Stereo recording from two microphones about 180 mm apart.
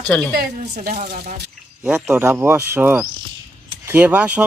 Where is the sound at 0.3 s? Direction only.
55° right (ahead or behind).